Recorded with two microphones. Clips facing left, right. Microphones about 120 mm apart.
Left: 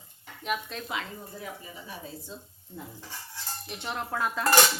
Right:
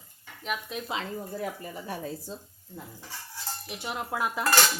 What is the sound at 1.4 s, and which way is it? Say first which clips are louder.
Speech: right 6 dB; 55° right (ahead or behind).